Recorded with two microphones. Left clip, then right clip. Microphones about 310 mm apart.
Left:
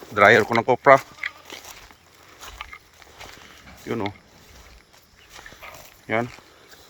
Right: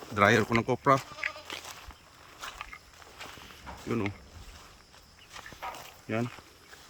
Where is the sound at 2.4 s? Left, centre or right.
Left.